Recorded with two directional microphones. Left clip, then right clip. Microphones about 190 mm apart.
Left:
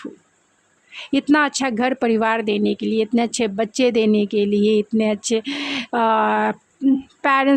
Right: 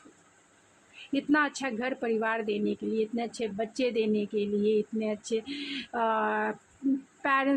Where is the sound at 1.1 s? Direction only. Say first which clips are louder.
Left 10 dB; 45° left (ahead or behind).